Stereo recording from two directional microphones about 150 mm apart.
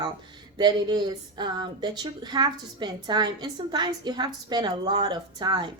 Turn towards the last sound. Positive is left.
turn(degrees=-30)  # may be behind; listen again after turning